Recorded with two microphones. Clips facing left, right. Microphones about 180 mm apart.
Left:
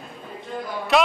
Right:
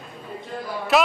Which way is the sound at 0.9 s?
Centre (ahead or behind).